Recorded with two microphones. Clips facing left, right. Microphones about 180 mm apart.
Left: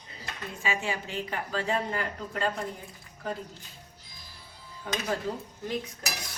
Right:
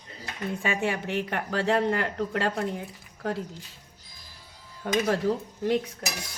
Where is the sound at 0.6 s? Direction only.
60° right (ahead or behind).